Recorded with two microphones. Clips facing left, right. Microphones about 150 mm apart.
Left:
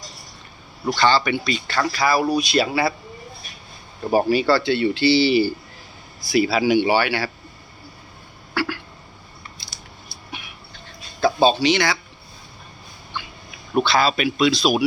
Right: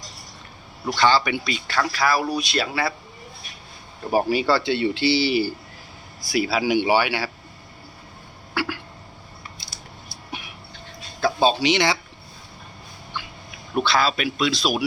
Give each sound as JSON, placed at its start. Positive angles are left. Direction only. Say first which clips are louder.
{"t": 0.9, "sound": "speech", "louder": "left 1 dB", "side_deg": -10}
{"t": 4.1, "sound": "speech", "louder": "left 2 dB", "side_deg": -15}
{"t": 8.5, "sound": "a sound", "louder": "left 2 dB", "side_deg": -15}
{"t": 11.2, "sound": "a sound", "louder": "left 3 dB", "side_deg": -5}
{"t": 11.6, "sound": "speech", "louder": "left 1 dB", "side_deg": -20}
{"t": 13.8, "sound": "speech", "louder": "left 1 dB", "side_deg": 0}